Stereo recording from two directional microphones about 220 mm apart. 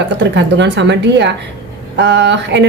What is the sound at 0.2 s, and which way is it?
A woman's voice, 55° right (ahead or behind).